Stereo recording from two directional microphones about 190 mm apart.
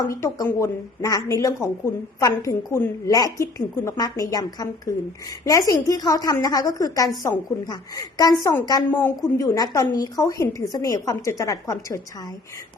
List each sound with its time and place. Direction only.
0.1 s a woman's voice: 15° left (ahead or behind)